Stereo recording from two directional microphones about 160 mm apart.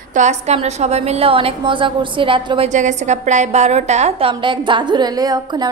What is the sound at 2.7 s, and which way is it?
A woman's voice, 50° right (ahead or behind).